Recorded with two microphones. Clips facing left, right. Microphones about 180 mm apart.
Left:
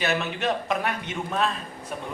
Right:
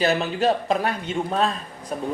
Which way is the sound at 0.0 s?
35° right (ahead or behind).